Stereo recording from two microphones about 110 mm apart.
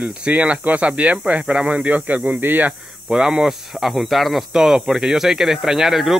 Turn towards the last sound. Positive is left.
turn(degrees=0)  # may be behind; listen again after turning